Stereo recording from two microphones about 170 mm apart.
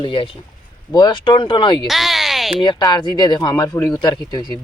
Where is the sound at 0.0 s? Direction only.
30° left (ahead or behind).